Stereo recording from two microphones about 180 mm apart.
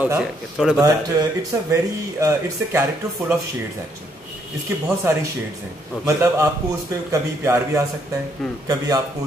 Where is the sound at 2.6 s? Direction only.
15° right (ahead or behind).